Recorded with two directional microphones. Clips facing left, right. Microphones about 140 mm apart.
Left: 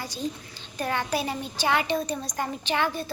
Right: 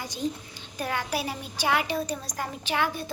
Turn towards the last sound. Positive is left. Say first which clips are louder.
# left 1 dB
turn(degrees=-5)  # may be behind; listen again after turning